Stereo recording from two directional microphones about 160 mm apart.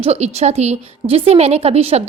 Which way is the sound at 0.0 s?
40° right (ahead or behind).